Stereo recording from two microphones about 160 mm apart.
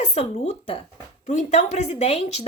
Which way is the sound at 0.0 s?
45° left (ahead or behind).